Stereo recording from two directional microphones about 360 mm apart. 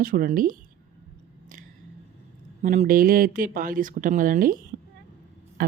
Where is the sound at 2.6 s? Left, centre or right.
Centre.